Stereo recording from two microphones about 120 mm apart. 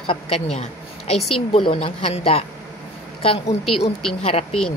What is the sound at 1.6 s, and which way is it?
Speech, 50° left (ahead or behind).